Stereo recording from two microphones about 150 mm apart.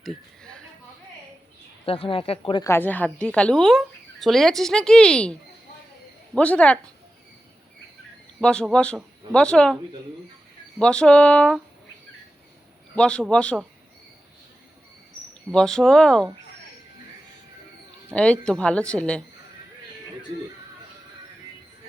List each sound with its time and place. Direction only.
0.0 s a sound: 5° left (ahead or behind)
1.9 s speech: 40° left (ahead or behind)
2.6 s a woman's voice: 15° left (ahead or behind)
8.4 s a woman's voice: 5° left (ahead or behind)
10.8 s a woman's voice: 5° left (ahead or behind)
13.0 s a woman's voice: 5° left (ahead or behind)
15.5 s a woman's voice: 5° left (ahead or behind)
18.1 s a woman's voice: 5° left (ahead or behind)